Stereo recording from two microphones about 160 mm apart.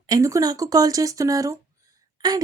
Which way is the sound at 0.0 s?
20° right (ahead or behind).